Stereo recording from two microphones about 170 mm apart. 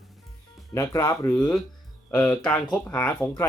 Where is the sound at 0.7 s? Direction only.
20° left (ahead or behind).